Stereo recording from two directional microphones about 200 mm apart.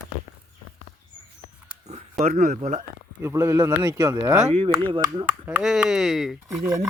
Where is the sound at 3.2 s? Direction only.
15° right (ahead or behind).